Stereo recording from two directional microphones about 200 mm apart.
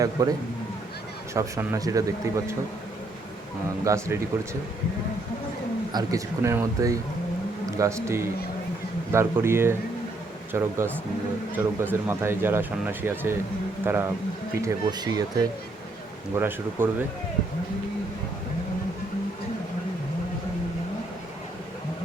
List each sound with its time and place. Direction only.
0.0 s speech: 15° right (ahead or behind)
3.8 s speech: 15° right (ahead or behind)
5.9 s speech: 20° right (ahead or behind)